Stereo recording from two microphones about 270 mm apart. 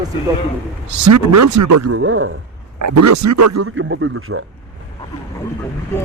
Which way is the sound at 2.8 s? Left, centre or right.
Right.